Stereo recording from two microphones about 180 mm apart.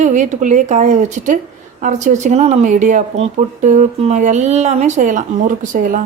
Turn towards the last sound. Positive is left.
turn(degrees=-45)  # may be behind; listen again after turning